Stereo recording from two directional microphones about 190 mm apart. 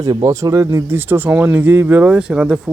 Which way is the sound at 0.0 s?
20° right (ahead or behind).